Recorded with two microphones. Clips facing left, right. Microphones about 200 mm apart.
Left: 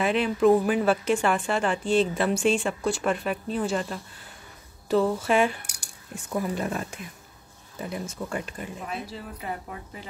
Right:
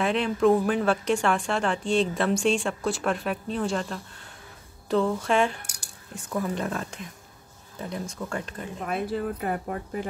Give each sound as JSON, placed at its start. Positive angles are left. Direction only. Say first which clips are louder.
{"t": 0.0, "sound": "speech", "louder": "left 1 dB", "side_deg": 5}
{"t": 8.8, "sound": "speech", "louder": "right 12 dB", "side_deg": -55}